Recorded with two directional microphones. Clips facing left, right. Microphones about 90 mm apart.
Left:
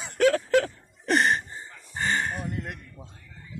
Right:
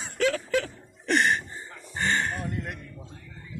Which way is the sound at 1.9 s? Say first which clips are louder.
Even; 15° left (ahead or behind).